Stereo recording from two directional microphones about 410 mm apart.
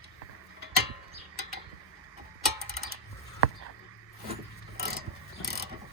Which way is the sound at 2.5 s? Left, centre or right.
Right.